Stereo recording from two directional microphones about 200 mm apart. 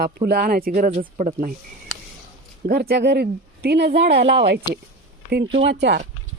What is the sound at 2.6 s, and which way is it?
Speech, 50° right (ahead or behind).